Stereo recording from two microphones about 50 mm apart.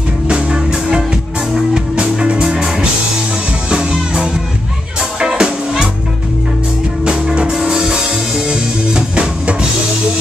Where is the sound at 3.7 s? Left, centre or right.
Centre.